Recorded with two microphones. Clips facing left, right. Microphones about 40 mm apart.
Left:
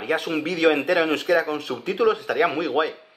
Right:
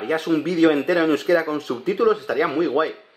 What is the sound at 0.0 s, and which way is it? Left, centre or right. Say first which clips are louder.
Speech: right 3 dB; left.